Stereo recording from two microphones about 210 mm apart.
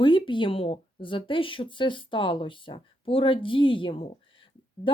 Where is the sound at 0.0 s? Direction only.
25° left (ahead or behind).